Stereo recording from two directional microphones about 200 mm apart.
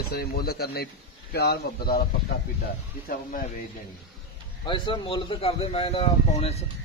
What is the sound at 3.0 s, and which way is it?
Speech, 45° left (ahead or behind).